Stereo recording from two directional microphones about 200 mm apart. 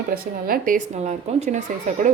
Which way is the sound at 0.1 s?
45° right (ahead or behind).